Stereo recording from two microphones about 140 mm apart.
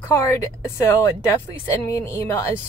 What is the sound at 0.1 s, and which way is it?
Speech, 20° left (ahead or behind).